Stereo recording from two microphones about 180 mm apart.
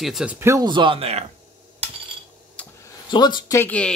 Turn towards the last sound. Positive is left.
turn(degrees=5)  # may be behind; listen again after turning